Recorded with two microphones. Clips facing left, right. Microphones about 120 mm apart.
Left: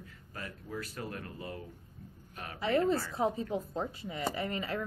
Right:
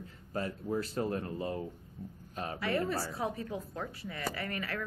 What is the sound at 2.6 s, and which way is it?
Speech, 25° left (ahead or behind).